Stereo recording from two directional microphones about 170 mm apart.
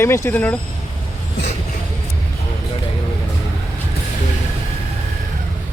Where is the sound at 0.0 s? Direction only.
15° left (ahead or behind).